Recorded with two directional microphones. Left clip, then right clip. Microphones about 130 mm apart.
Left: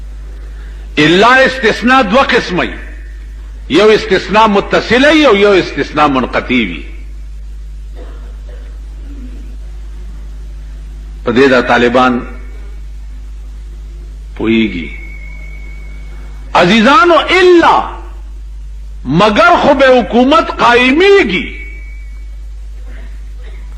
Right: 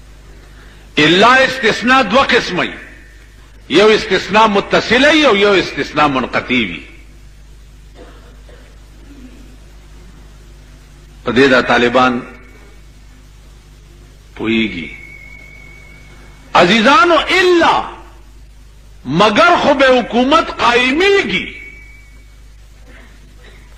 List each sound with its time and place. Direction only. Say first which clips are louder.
0.9 s a man's voice: left 2 dB; 35° left (ahead or behind)
11.2 s a man's voice: left 2 dB; 35° left (ahead or behind)
14.3 s a man's voice: left 4 dB; 35° left (ahead or behind)
16.5 s a man's voice: left 2 dB; 35° left (ahead or behind)
19.0 s a man's voice: left 2 dB; 35° left (ahead or behind)